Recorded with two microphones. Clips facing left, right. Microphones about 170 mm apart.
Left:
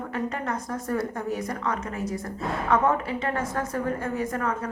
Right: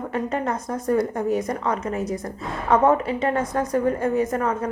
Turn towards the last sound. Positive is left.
turn(degrees=-20)  # may be behind; listen again after turning